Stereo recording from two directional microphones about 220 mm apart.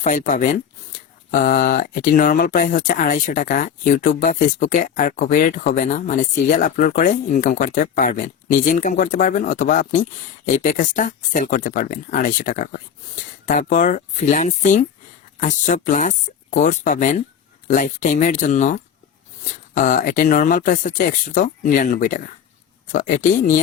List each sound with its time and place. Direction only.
0.0 s speech: 35° left (ahead or behind)